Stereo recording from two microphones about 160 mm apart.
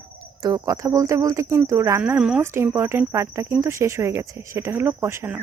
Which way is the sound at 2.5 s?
15° right (ahead or behind).